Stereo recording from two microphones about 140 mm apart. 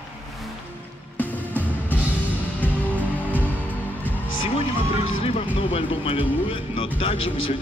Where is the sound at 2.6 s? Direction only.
10° left (ahead or behind).